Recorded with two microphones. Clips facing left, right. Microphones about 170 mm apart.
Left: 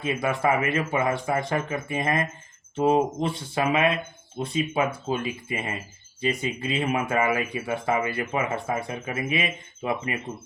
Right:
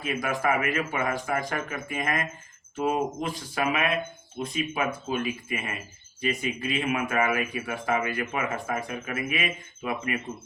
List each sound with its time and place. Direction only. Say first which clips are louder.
0.0 s speech: left 3 dB; 30° left (ahead or behind)